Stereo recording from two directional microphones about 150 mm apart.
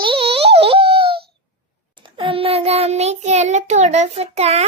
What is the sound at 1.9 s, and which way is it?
Child singing, 35° right (ahead or behind).